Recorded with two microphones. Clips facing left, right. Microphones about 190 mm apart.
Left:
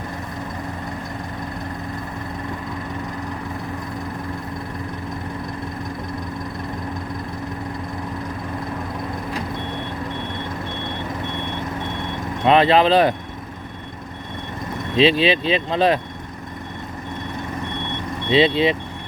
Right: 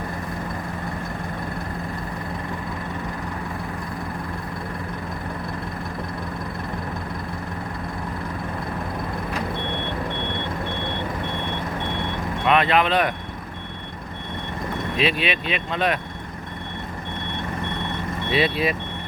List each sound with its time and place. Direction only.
12.5 s speech: 30° left (ahead or behind)
14.9 s speech: 30° left (ahead or behind)
18.3 s speech: 25° left (ahead or behind)